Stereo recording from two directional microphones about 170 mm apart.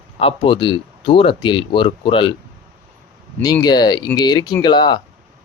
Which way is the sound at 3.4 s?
25° left (ahead or behind).